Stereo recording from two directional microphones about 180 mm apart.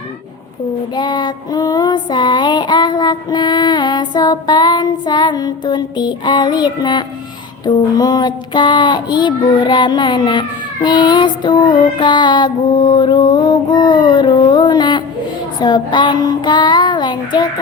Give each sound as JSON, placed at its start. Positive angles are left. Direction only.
{"t": 0.9, "sound": "child singing", "side_deg": 25}